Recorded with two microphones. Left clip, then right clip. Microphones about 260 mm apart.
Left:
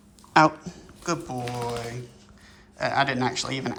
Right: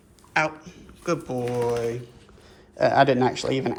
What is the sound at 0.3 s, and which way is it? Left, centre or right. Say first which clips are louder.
A man's voice: left 5 dB; centre.